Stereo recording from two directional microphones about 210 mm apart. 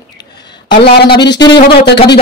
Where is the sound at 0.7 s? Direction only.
50° left (ahead or behind).